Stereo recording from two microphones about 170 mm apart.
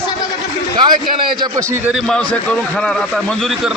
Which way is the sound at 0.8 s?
25° right (ahead or behind).